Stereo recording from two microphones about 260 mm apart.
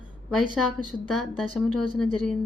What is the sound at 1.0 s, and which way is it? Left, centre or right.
Speech, centre.